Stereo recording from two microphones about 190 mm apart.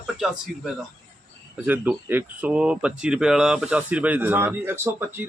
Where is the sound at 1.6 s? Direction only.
10° right (ahead or behind).